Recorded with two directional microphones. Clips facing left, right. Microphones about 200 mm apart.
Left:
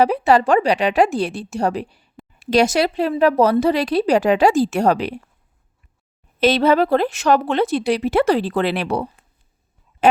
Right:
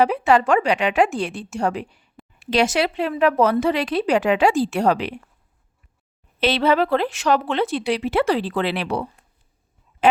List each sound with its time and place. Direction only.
0.0 s speech: 35° left (ahead or behind)
6.4 s a woman's voice: 45° left (ahead or behind)
10.0 s a sound: 40° left (ahead or behind)